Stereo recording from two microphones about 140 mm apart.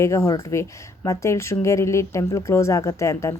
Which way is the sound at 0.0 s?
20° left (ahead or behind).